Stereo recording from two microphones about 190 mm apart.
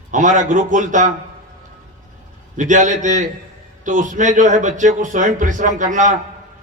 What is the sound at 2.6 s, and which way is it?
A man's voice, 40° right (ahead or behind).